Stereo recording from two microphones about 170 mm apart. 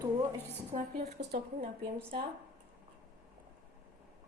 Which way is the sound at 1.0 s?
70° right (ahead or behind).